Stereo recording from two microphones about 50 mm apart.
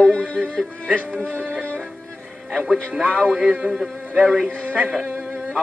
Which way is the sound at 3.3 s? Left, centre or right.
Right.